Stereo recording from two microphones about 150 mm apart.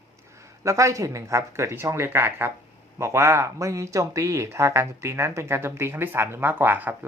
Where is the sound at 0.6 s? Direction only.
20° right (ahead or behind).